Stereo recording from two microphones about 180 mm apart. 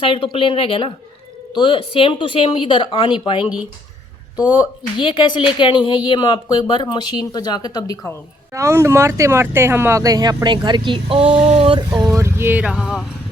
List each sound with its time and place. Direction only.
0.0 s speech: 30° left (ahead or behind)
3.4 s speech: 5° right (ahead or behind)
4.9 s speech: 25° left (ahead or behind)
8.5 s speech: 15° right (ahead or behind); by 11.8 s 35° right (ahead or behind)
11.9 s speech: 15° right (ahead or behind)